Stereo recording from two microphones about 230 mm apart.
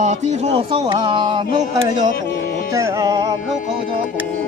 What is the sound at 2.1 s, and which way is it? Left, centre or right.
Music, left.